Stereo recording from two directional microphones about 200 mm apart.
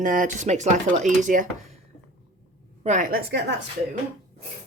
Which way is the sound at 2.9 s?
40° right (ahead or behind).